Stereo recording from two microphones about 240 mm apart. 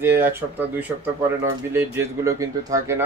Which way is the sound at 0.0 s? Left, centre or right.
Centre.